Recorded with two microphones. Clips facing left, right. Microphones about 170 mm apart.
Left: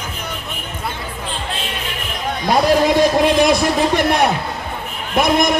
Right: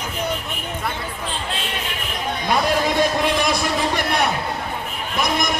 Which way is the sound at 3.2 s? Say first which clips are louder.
Left 7 dB; 50° left (ahead or behind).